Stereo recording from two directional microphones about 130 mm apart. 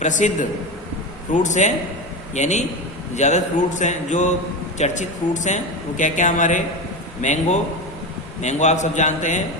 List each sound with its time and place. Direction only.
0.0 s a man's voice: 75° left (ahead or behind)